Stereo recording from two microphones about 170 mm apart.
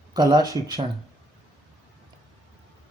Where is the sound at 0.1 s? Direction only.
25° right (ahead or behind).